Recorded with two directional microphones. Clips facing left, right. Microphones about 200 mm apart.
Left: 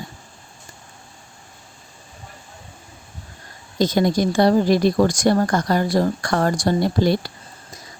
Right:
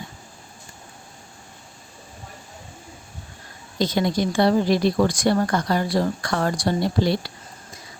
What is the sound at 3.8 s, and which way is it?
Speech, 45° left (ahead or behind).